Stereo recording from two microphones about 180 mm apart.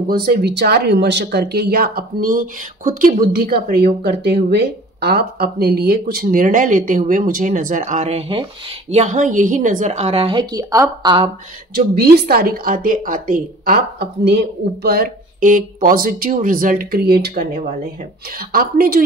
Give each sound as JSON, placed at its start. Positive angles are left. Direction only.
{"t": 0.1, "sound": "a woman's voice", "side_deg": -55}
{"t": 11.7, "sound": "a woman's voice", "side_deg": -60}